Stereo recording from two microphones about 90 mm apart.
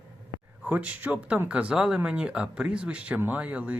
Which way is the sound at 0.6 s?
15° right (ahead or behind).